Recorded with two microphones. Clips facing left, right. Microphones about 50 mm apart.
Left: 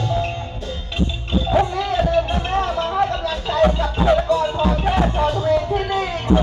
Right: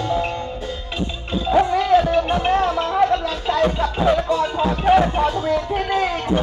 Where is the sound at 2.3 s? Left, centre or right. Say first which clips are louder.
Right 3 dB; centre.